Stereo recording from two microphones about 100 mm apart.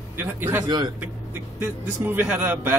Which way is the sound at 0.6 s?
45° right (ahead or behind).